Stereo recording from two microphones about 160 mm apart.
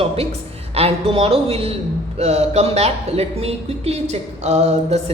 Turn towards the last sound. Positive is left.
turn(degrees=-45)  # may be behind; listen again after turning